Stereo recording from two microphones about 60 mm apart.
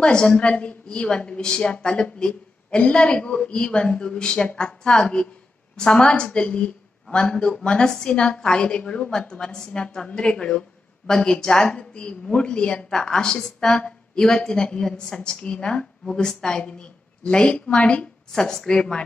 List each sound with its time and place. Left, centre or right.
0.0 s a woman's voice: centre